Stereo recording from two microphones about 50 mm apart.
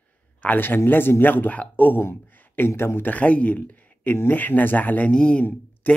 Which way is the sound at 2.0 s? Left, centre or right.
Left.